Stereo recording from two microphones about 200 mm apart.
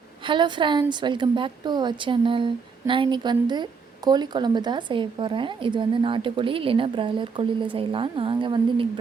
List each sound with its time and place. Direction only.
0.3 s a woman's voice: 25° right (ahead or behind)